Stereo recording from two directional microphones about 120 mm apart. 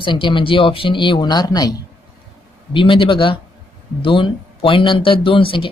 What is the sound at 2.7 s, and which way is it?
Speech, 45° left (ahead or behind).